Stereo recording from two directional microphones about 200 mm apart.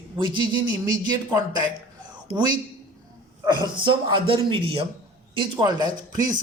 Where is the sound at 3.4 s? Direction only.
20° right (ahead or behind).